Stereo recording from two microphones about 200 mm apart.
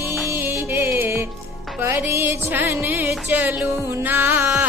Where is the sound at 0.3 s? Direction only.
10° right (ahead or behind).